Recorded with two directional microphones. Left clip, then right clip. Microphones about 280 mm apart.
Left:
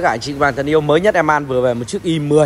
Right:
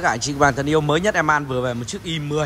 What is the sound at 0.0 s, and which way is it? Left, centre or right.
Speech, centre.